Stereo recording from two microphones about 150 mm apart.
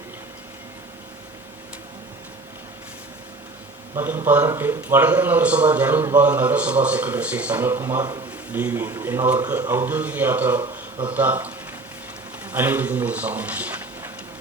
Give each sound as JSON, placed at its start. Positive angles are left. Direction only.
{"t": 3.9, "sound": "a man's voice", "side_deg": -15}